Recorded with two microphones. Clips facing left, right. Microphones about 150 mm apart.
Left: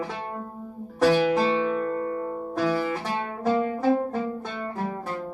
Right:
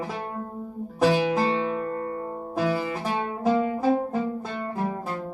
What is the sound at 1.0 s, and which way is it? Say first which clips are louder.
Music: left 1 dB; 20° right (ahead or behind).